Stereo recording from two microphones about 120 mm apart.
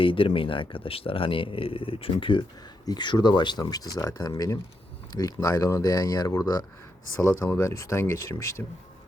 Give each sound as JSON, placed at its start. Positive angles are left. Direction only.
{"t": 0.0, "sound": "speech", "side_deg": 45}
{"t": 2.8, "sound": "speech", "side_deg": 35}